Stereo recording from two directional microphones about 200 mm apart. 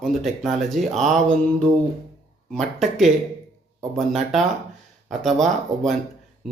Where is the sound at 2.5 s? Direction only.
Centre (ahead or behind).